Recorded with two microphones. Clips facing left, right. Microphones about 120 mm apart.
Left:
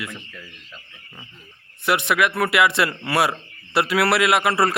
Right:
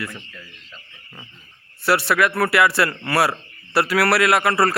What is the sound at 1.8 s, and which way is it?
Speech, 15° left (ahead or behind).